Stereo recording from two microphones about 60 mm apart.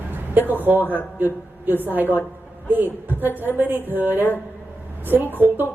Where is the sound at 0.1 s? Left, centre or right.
Right.